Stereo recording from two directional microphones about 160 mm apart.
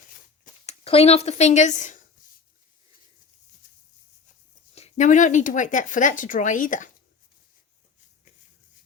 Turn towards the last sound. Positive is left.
turn(degrees=55)  # may be behind; listen again after turning